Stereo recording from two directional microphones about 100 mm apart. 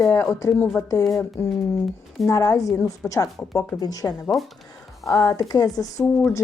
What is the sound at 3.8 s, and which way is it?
Speech, 40° left (ahead or behind).